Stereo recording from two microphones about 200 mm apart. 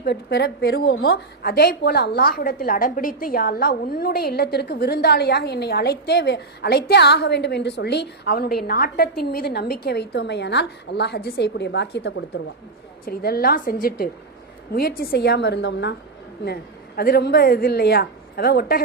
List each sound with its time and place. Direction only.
0.0 s a woman's voice: 50° left (ahead or behind)
13.1 s a woman's voice: 50° left (ahead or behind)